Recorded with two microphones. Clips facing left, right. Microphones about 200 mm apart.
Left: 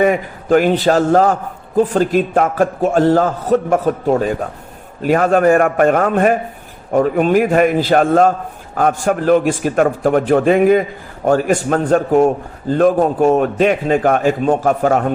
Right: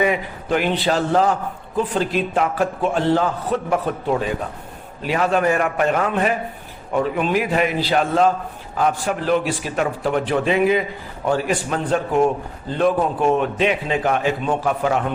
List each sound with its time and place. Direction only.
0.0 s a man's voice: 45° left (ahead or behind)